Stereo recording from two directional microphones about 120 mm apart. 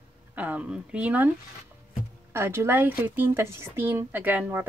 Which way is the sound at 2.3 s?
20° right (ahead or behind).